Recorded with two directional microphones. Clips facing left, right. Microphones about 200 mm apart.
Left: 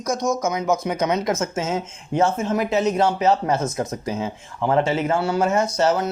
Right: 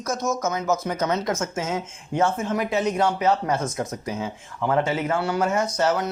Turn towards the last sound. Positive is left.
turn(degrees=25)  # may be behind; listen again after turning